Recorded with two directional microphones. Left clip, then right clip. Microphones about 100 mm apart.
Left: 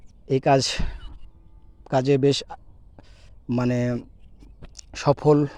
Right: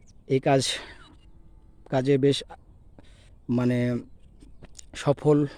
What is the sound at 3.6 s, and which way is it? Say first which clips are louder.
Speech: left 2 dB; 20° right (ahead or behind).